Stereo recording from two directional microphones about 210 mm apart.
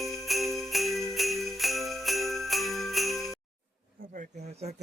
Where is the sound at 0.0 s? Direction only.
Centre (ahead or behind).